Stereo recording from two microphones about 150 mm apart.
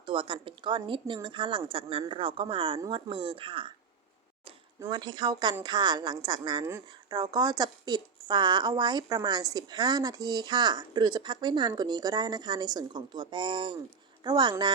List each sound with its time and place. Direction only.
0.0 s a woman's voice: 35° right (ahead or behind)
4.8 s a woman's voice: 30° right (ahead or behind)